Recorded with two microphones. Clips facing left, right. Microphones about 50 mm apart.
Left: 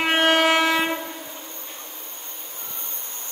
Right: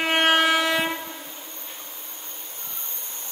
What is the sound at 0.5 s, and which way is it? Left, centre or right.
Train, centre.